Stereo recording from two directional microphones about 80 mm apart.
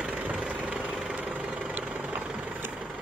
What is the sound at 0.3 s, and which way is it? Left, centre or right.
Vehicle, centre.